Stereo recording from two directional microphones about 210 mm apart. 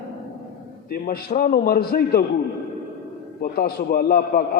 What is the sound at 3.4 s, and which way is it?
A man's voice, 45° left (ahead or behind).